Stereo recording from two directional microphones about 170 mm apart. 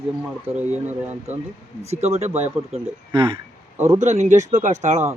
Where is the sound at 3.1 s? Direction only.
30° right (ahead or behind).